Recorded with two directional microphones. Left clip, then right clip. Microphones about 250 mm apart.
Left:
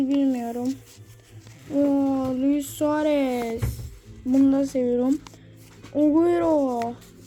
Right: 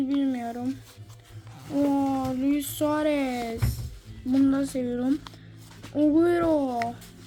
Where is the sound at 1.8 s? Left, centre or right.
Centre.